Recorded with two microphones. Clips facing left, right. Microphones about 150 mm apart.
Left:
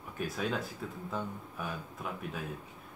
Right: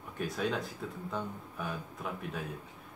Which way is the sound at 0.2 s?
Centre (ahead or behind).